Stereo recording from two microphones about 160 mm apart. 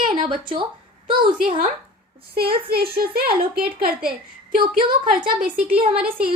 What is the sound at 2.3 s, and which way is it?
A woman's voice, 75° right (ahead or behind).